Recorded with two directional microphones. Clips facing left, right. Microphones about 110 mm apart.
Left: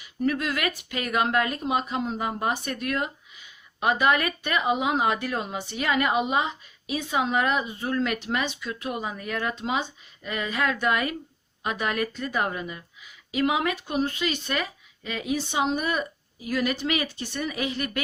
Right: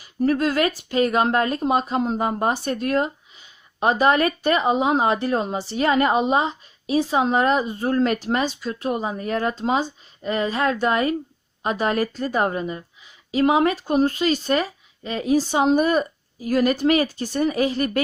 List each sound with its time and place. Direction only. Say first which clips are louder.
0.0 s speech: right 6 dB; 35° right (ahead or behind)